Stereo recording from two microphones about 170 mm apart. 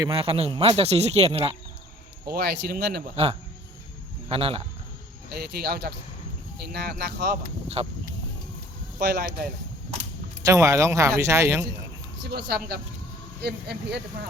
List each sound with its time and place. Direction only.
0.0 s speech: 30° right (ahead or behind)
2.2 s speech: 65° right (ahead or behind)
4.3 s speech: 35° right (ahead or behind)
5.3 s speech: 70° right (ahead or behind)
7.8 s speech: 35° right (ahead or behind)
9.0 s speech: 70° right (ahead or behind)
10.4 s speech: 20° right (ahead or behind)
12.2 s speech: 75° right (ahead or behind)